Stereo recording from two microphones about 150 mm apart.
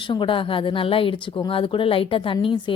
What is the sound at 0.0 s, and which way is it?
A woman's voice, 35° left (ahead or behind).